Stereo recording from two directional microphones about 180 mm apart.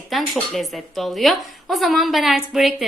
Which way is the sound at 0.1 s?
Centre (ahead or behind).